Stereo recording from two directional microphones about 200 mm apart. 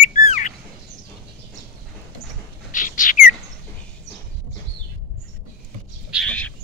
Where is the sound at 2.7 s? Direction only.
40° left (ahead or behind).